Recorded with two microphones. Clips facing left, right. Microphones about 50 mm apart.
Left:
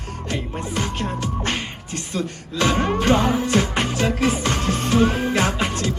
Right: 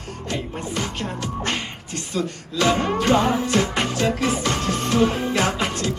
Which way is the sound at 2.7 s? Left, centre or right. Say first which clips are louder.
Even; left.